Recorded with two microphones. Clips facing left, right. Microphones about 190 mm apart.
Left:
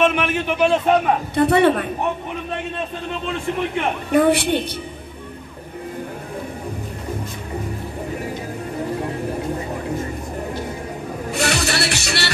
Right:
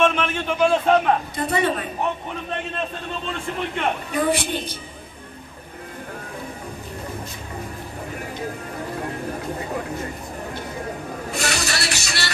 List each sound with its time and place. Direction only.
0.0 s a man's voice: 15° left (ahead or behind)
1.3 s a woman's voice: 60° left (ahead or behind)
4.1 s a woman's voice: 60° left (ahead or behind)
11.3 s music: 60° left (ahead or behind)